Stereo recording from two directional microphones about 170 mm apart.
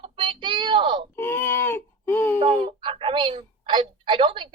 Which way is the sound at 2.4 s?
30° right (ahead or behind).